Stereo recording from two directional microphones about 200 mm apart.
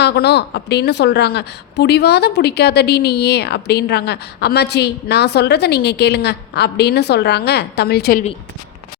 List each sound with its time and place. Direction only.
0.0 s a woman's voice: 55° left (ahead or behind)